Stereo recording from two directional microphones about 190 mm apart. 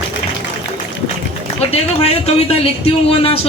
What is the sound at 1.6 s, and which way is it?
Speech, 35° left (ahead or behind).